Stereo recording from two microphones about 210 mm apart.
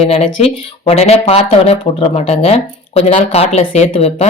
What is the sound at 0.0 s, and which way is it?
Speech, 30° left (ahead or behind).